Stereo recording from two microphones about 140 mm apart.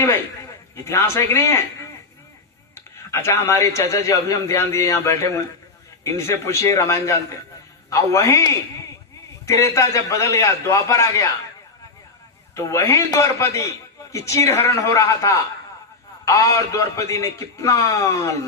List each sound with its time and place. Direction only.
0.9 s a man's voice: 20° left (ahead or behind)
3.1 s a man's voice: 20° left (ahead or behind)
9.7 s a man's voice: 25° left (ahead or behind)
12.5 s a man's voice: 20° left (ahead or behind)